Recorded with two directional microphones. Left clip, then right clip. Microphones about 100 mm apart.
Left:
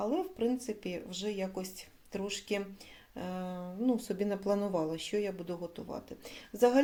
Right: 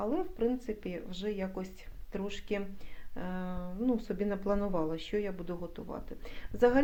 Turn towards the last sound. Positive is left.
turn(degrees=15)  # may be behind; listen again after turning